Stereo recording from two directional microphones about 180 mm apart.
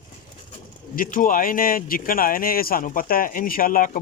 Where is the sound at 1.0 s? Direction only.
50° left (ahead or behind).